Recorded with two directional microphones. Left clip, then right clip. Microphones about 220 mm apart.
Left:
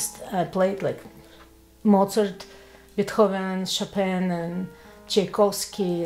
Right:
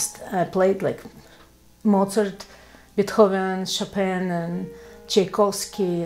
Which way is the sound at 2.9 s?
65° right (ahead or behind).